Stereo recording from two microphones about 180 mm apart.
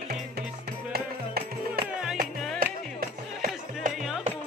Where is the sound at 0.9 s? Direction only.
60° right (ahead or behind).